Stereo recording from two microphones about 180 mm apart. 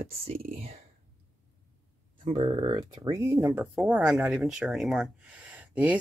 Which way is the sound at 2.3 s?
30° right (ahead or behind).